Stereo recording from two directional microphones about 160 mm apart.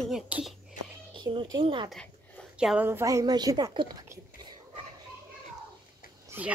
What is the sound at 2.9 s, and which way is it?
A woman's voice, 15° right (ahead or behind).